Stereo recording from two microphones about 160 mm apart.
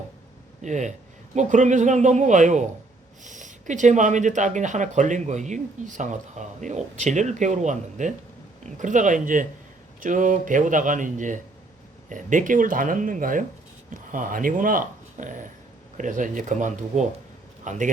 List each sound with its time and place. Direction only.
0.6 s speech: 50° right (ahead or behind)